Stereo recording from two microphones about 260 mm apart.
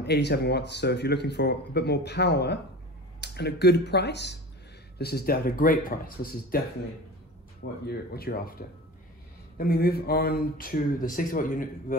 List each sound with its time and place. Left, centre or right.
0.0 s speech: left
7.8 s speech: left